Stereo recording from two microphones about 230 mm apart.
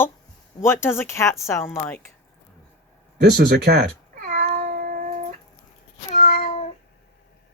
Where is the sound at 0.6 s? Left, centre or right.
Centre.